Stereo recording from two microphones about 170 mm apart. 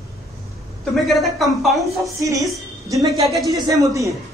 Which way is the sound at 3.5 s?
20° right (ahead or behind).